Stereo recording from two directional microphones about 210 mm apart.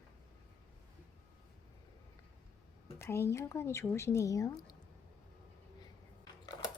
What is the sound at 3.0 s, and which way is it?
Speech, 10° left (ahead or behind).